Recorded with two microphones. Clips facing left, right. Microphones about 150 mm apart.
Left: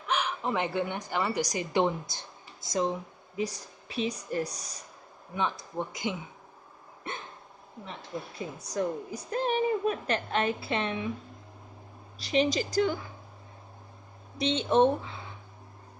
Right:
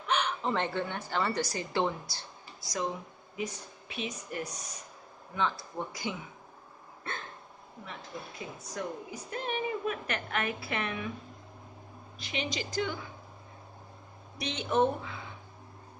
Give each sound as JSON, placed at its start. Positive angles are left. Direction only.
{"t": 0.0, "sound": "speech", "side_deg": 5}
{"t": 3.3, "sound": "a woman's voice", "side_deg": 35}
{"t": 5.3, "sound": "speech", "side_deg": 20}
{"t": 7.1, "sound": "hiccup", "side_deg": 20}
{"t": 8.6, "sound": "a woman's voice", "side_deg": 35}
{"t": 12.2, "sound": "a woman's voice", "side_deg": 35}
{"t": 14.4, "sound": "speech", "side_deg": 25}